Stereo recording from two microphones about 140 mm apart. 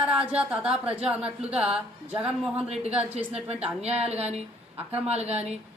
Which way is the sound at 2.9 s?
10° right (ahead or behind).